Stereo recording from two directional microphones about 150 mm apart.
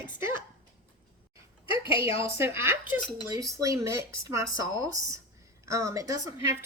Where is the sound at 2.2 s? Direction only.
15° right (ahead or behind).